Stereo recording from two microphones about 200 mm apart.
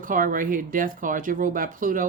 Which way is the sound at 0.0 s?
40° right (ahead or behind).